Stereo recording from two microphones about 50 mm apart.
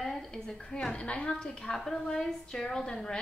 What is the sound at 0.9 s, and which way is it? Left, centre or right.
A woman's voice, left.